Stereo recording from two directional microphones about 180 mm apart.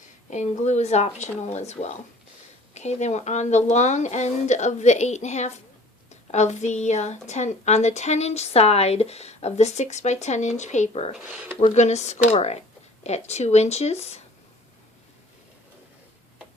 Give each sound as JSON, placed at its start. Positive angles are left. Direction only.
{"t": 0.3, "sound": "a woman's voice", "side_deg": 40}
{"t": 11.2, "sound": "speech", "side_deg": -5}
{"t": 11.7, "sound": "a woman's voice", "side_deg": 40}